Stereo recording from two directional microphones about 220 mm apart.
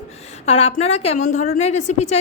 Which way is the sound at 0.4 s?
30° left (ahead or behind).